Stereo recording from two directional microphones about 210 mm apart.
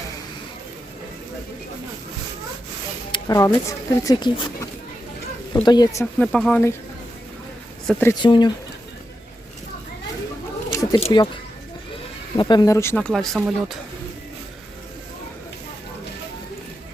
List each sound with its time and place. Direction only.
3.1 s speech: 15° left (ahead or behind)
6.2 s speech: 5° left (ahead or behind)
7.9 s speech: 10° left (ahead or behind)
8.2 s speech: 20° left (ahead or behind)
10.8 s speech: 25° left (ahead or behind)
12.4 s speech: 20° left (ahead or behind); by 13.7 s centre (ahead or behind)